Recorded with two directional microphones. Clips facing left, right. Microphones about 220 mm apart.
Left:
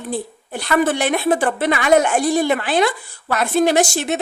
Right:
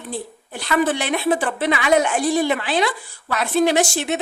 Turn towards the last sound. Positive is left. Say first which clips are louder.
# left 2 dB
turn(degrees=45)  # may be behind; listen again after turning